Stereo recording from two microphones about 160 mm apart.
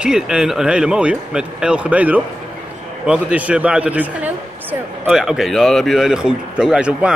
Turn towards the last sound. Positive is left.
turn(degrees=-5)  # may be behind; listen again after turning